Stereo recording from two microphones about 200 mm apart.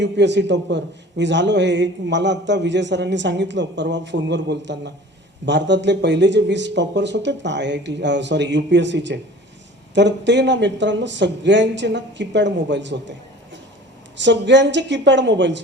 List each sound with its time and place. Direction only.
0.0 s a man's voice: 60° right (ahead or behind)